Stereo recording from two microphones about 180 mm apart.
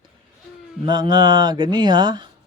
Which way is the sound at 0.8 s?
25° right (ahead or behind).